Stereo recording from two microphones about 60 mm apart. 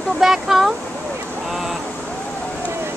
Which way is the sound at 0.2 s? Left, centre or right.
Centre.